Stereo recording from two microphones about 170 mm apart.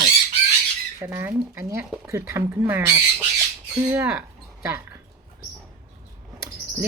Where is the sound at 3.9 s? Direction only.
10° right (ahead or behind).